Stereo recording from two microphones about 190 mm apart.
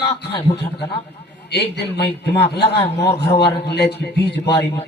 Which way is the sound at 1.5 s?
60° left (ahead or behind).